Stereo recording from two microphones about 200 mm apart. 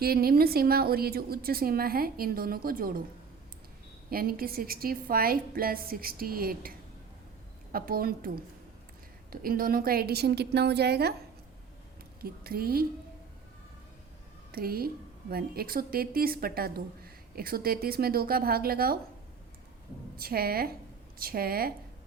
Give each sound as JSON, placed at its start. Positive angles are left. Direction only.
{"t": 0.0, "sound": "speech", "side_deg": -50}
{"t": 4.1, "sound": "speech", "side_deg": -50}
{"t": 9.3, "sound": "speech", "side_deg": -45}
{"t": 12.2, "sound": "speech", "side_deg": -50}
{"t": 14.5, "sound": "speech", "side_deg": -50}
{"t": 20.1, "sound": "speech", "side_deg": -50}